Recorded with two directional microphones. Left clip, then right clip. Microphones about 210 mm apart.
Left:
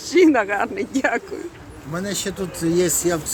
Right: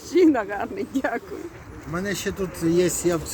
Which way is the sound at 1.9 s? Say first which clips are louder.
Left 1 dB; 20° left (ahead or behind).